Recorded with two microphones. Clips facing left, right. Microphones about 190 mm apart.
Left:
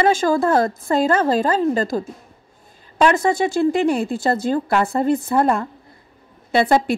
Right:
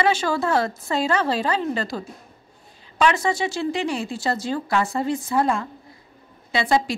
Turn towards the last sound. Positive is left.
turn(degrees=55)  # may be behind; listen again after turning